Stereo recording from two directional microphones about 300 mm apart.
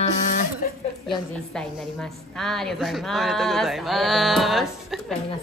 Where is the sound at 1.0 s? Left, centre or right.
Centre.